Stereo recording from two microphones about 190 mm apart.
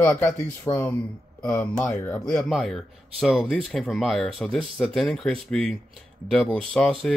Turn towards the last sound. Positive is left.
turn(degrees=5)  # may be behind; listen again after turning